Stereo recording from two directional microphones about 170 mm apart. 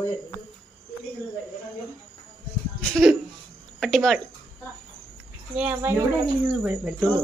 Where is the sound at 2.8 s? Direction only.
Centre (ahead or behind).